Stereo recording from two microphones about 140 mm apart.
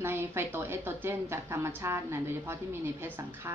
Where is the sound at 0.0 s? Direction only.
15° right (ahead or behind).